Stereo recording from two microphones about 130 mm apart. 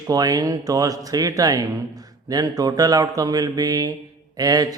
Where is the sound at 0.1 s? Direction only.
30° right (ahead or behind).